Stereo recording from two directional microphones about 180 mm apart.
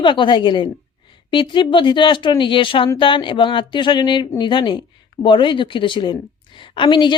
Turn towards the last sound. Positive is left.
turn(degrees=25)  # may be behind; listen again after turning